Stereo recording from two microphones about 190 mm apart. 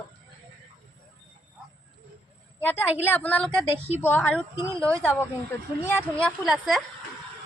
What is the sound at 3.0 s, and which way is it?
A woman's voice, 10° left (ahead or behind).